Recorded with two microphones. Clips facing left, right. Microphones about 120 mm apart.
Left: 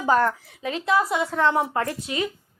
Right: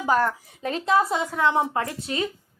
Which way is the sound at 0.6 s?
35° right (ahead or behind).